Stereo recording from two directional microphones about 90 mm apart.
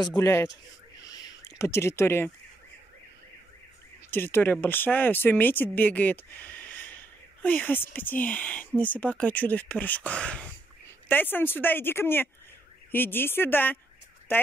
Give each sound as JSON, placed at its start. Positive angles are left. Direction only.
{"t": 0.2, "sound": "speech", "side_deg": 30}
{"t": 1.0, "sound": "a sound", "side_deg": 50}
{"t": 1.6, "sound": "speech", "side_deg": 30}
{"t": 4.1, "sound": "speech", "side_deg": 25}